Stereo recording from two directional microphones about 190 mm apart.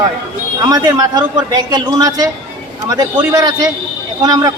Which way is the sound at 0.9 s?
20° right (ahead or behind).